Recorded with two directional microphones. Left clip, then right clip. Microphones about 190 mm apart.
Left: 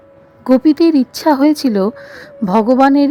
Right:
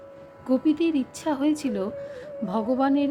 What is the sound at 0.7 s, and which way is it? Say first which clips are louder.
Speech: left 13 dB; 50° left (ahead or behind).